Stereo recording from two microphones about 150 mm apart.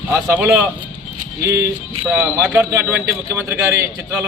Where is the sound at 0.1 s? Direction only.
10° right (ahead or behind).